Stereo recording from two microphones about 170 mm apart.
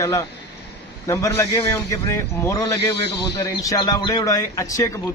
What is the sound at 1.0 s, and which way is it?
A man's voice, 15° left (ahead or behind).